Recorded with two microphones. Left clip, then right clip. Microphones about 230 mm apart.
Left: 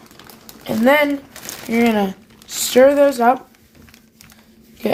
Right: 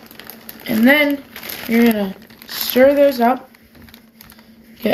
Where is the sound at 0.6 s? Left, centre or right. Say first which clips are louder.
Right 1 dB; left.